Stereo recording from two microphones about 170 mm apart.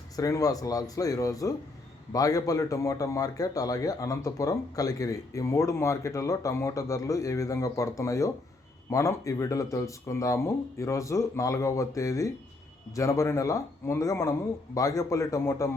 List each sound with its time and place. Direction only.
0.2 s speech: 20° left (ahead or behind)